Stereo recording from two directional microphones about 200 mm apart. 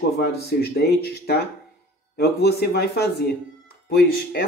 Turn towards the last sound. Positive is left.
turn(degrees=50)  # may be behind; listen again after turning